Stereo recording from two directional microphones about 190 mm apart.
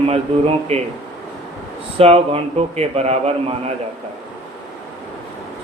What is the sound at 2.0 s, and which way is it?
A man's voice, 30° right (ahead or behind).